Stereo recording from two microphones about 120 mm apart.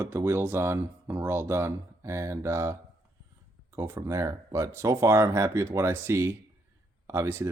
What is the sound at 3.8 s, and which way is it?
Speech, 25° right (ahead or behind).